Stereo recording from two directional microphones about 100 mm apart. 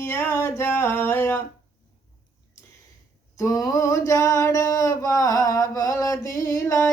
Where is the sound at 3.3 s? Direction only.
35° left (ahead or behind).